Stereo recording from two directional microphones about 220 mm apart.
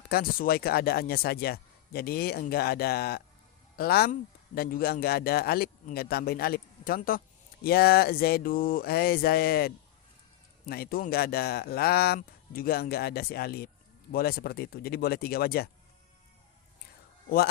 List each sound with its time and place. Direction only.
0.1 s speech: 40° left (ahead or behind)
17.2 s a man's voice: 45° left (ahead or behind)